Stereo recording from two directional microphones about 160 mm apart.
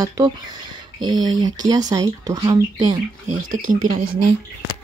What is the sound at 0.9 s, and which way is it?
Speech, 25° right (ahead or behind).